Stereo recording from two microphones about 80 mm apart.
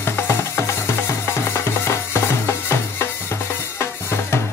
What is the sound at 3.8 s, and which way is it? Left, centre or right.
Drum, left.